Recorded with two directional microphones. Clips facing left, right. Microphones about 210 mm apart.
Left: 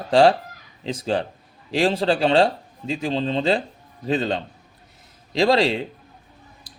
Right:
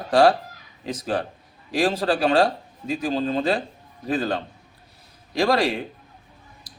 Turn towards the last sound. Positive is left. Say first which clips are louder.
# left 2 dB
turn(degrees=25)  # may be behind; listen again after turning